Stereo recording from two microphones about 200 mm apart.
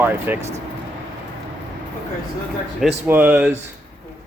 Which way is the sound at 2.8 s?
10° right (ahead or behind).